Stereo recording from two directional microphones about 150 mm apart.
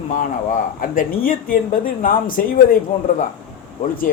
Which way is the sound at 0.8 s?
70° left (ahead or behind).